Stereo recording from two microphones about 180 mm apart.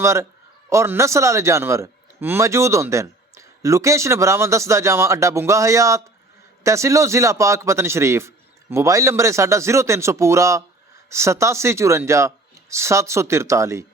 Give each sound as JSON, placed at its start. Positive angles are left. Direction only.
{"t": 0.0, "sound": "a man's voice", "side_deg": -15}